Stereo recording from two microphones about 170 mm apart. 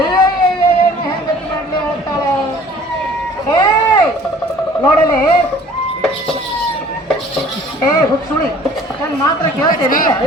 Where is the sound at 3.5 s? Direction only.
25° left (ahead or behind).